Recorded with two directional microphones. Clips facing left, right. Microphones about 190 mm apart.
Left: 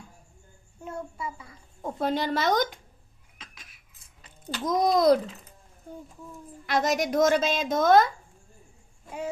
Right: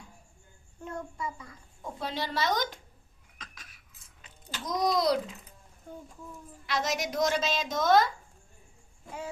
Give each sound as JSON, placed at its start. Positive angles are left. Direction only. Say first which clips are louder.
{"t": 0.9, "sound": "speech", "louder": "left 1 dB", "side_deg": 5}
{"t": 1.8, "sound": "a woman's voice", "louder": "left 8 dB", "side_deg": 50}
{"t": 3.3, "sound": "a sound", "louder": "even", "side_deg": 10}
{"t": 4.4, "sound": "a woman's voice", "louder": "left 5 dB", "side_deg": 50}
{"t": 6.7, "sound": "a woman's voice", "louder": "left 6 dB", "side_deg": 50}